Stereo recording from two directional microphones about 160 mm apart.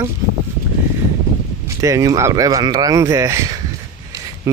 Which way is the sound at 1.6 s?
20° right (ahead or behind).